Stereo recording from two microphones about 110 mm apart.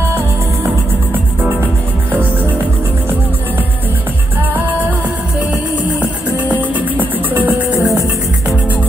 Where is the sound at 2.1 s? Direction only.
15° right (ahead or behind).